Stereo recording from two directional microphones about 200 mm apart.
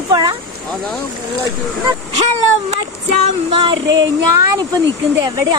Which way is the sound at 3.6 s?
25° right (ahead or behind).